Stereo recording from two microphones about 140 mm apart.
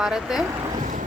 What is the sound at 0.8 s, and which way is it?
Vehicle, 65° right (ahead or behind).